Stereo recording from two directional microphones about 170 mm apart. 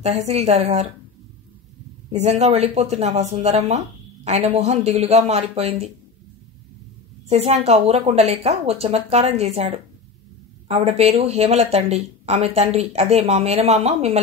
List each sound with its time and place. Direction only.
0.0 s speech: 40° right (ahead or behind)
2.0 s speech: 40° right (ahead or behind)
7.2 s speech: 40° right (ahead or behind)